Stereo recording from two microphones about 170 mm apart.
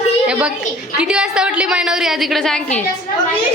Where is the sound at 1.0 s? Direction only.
5° right (ahead or behind).